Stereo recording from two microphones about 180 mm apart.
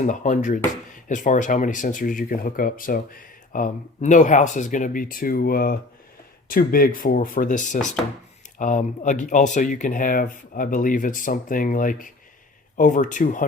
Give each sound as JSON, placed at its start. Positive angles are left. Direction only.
{"t": 0.0, "sound": "speech", "side_deg": 45}